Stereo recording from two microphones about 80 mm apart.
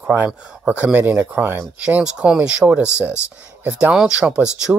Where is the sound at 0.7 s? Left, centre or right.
Centre.